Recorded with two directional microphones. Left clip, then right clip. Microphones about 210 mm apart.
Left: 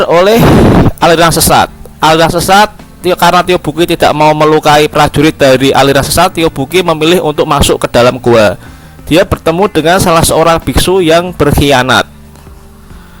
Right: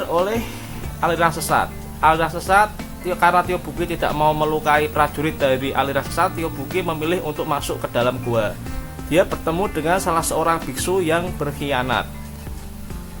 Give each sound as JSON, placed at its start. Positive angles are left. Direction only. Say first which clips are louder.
{"t": 0.0, "sound": "speech", "louder": "left 15 dB", "side_deg": 45}